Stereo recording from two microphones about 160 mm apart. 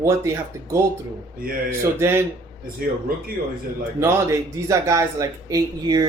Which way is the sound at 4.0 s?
20° right (ahead or behind).